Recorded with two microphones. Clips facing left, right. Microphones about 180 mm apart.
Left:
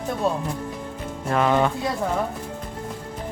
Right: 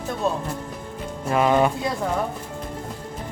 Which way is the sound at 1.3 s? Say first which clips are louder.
Right 1 dB; 10° right (ahead or behind).